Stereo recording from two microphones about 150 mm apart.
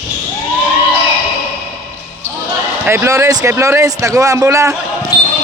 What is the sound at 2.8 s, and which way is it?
Speech, 15° right (ahead or behind).